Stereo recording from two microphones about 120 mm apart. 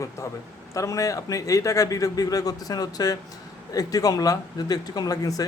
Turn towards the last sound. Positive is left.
turn(degrees=30)  # may be behind; listen again after turning